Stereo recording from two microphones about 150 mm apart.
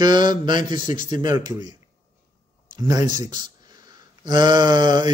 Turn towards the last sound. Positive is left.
turn(degrees=-30)  # may be behind; listen again after turning